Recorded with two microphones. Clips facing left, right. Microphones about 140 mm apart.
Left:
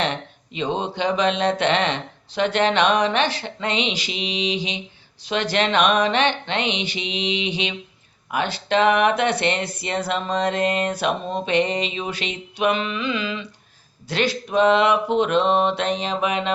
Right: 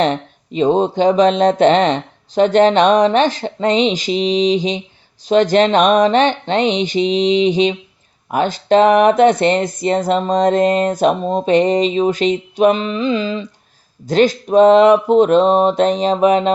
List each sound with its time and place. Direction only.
0.0 s speech: 40° right (ahead or behind)